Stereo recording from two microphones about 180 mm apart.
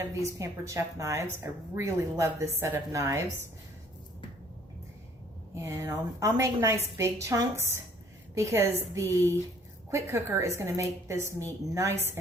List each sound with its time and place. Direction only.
0.0 s a woman's voice: 15° right (ahead or behind)
5.5 s a woman's voice: 15° right (ahead or behind)